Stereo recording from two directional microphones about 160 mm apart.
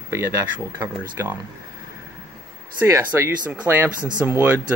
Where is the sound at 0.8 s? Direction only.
10° right (ahead or behind).